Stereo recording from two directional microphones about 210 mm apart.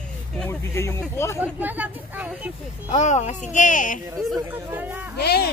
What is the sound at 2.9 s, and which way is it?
Speech, 35° left (ahead or behind).